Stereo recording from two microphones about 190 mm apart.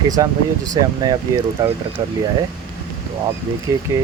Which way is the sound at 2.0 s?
30° right (ahead or behind).